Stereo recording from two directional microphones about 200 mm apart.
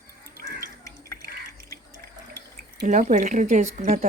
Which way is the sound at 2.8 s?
40° right (ahead or behind).